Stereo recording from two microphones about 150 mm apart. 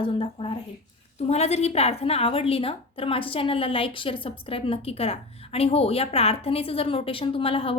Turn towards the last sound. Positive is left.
turn(degrees=40)  # may be behind; listen again after turning